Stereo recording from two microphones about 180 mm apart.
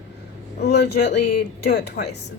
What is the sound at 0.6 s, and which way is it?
Speech, 65° left (ahead or behind).